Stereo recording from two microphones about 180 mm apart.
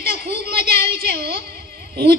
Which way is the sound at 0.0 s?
60° right (ahead or behind).